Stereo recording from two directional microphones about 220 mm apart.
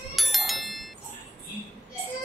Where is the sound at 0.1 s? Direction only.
Centre (ahead or behind).